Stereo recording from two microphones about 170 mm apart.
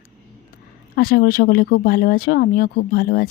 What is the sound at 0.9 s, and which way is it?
Speech, 65° left (ahead or behind).